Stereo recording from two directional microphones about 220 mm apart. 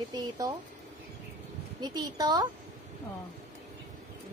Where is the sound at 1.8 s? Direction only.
20° right (ahead or behind).